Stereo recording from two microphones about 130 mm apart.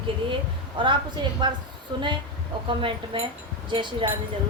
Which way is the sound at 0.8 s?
40° right (ahead or behind).